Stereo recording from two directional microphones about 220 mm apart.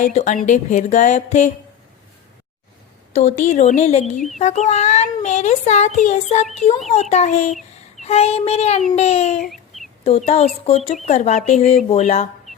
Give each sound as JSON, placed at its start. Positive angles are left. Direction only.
{"t": 0.0, "sound": "a child's voice", "side_deg": 35}
{"t": 3.1, "sound": "a child's voice", "side_deg": 30}